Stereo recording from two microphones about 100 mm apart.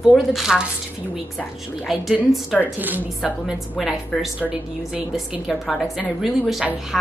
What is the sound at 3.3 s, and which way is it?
A woman's voice, 5° right (ahead or behind).